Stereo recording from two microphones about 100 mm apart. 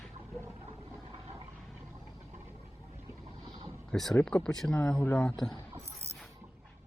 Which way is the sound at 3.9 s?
5° left (ahead or behind).